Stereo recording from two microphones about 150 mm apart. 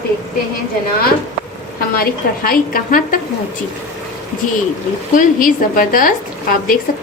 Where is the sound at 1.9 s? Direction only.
75° left (ahead or behind).